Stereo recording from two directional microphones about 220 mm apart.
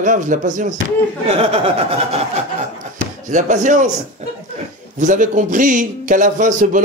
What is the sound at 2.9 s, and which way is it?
Speech, 35° right (ahead or behind).